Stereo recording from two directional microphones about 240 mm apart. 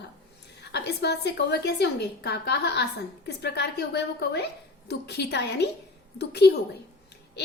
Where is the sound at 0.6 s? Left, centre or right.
Left.